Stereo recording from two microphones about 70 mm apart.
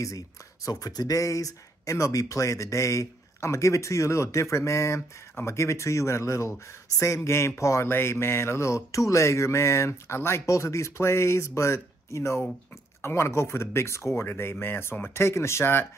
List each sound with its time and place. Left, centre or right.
0.7 s mantra: left
13.0 s speech: left